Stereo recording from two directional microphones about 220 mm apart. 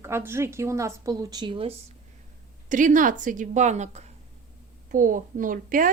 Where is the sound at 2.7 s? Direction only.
35° right (ahead or behind).